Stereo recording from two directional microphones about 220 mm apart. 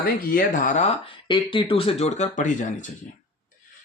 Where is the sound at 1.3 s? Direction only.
25° left (ahead or behind).